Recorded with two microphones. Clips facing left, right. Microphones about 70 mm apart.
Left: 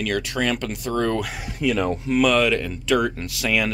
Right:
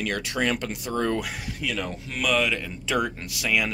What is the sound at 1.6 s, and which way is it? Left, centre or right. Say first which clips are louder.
Speech: left 9 dB; left.